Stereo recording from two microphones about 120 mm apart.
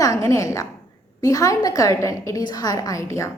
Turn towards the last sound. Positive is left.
turn(degrees=25)  # may be behind; listen again after turning